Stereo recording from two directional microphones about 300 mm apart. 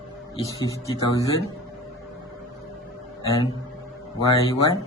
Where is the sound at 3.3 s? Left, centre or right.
Centre.